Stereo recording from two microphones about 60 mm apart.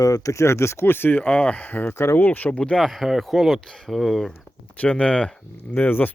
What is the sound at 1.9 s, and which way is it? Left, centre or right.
Speech, left.